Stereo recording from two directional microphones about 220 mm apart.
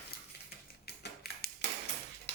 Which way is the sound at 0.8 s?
45° left (ahead or behind).